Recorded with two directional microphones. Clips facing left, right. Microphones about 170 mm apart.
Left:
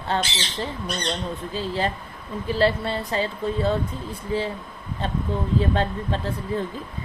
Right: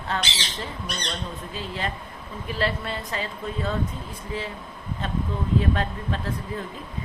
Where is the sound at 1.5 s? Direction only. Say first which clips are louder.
Left 6 dB; 30° left (ahead or behind).